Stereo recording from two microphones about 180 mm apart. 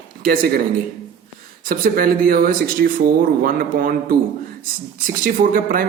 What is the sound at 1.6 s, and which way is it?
Speech, 50° right (ahead or behind).